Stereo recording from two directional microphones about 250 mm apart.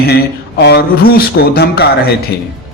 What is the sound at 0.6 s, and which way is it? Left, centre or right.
A man's voice, left.